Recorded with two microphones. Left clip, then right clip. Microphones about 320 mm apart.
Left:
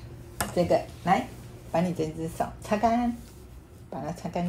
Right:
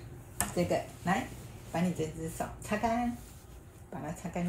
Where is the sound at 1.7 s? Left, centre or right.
Left.